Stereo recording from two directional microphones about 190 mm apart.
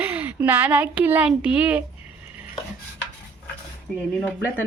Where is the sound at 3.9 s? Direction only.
5° left (ahead or behind).